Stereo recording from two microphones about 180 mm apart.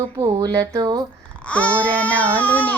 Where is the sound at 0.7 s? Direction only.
20° right (ahead or behind).